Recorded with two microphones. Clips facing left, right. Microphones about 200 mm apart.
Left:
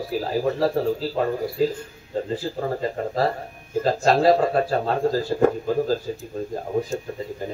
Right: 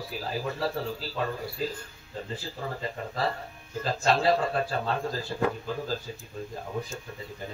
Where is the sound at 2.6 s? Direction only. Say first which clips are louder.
Left 7 dB; 45° left (ahead or behind).